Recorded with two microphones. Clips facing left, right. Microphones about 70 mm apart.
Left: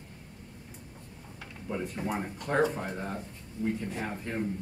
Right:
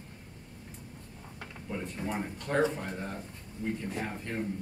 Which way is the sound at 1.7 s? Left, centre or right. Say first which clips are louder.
Left 3 dB; centre.